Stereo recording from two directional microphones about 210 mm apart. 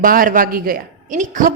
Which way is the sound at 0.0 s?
40° right (ahead or behind).